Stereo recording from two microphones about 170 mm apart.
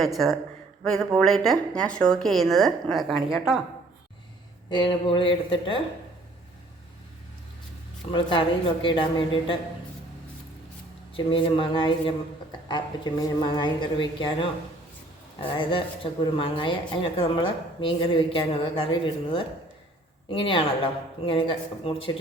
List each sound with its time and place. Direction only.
0.0 s speech: centre (ahead or behind)
4.7 s a man's voice: 25° left (ahead or behind)
8.1 s a woman's voice: 30° left (ahead or behind)
11.1 s a man's voice: 30° left (ahead or behind)